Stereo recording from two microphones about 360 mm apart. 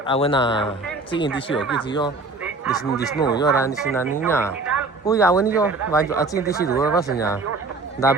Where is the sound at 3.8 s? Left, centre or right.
Centre.